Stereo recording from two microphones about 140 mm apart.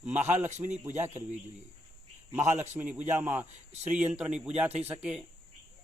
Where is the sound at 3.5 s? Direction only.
55° right (ahead or behind).